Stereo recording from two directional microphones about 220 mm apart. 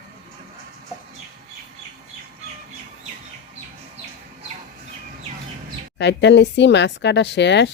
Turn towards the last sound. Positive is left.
turn(degrees=50)  # may be behind; listen again after turning